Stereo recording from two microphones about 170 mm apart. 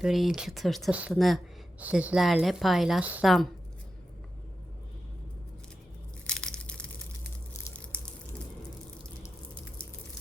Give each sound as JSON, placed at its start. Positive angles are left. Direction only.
{"t": 0.0, "sound": "a woman's voice", "side_deg": 0}
{"t": 6.2, "sound": "crushing", "side_deg": 5}
{"t": 7.5, "sound": "crushing", "side_deg": 15}